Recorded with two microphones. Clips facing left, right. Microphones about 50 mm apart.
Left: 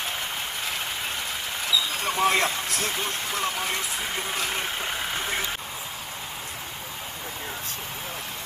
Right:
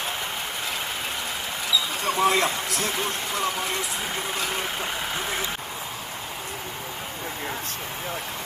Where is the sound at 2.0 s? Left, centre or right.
Right.